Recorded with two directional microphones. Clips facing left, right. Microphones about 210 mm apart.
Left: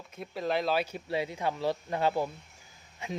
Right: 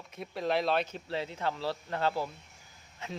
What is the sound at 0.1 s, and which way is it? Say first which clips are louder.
Speech: even; centre (ahead or behind).